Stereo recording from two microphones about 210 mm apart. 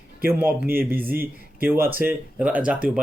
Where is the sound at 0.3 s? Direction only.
10° right (ahead or behind).